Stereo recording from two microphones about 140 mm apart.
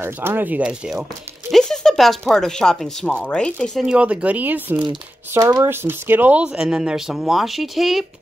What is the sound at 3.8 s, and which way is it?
Speech, 10° right (ahead or behind).